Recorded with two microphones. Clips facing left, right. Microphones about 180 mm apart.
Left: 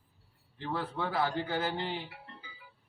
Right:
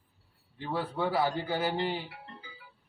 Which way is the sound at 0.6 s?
10° right (ahead or behind).